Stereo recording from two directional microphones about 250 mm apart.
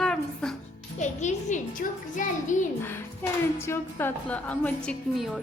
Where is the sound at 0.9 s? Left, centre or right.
Left.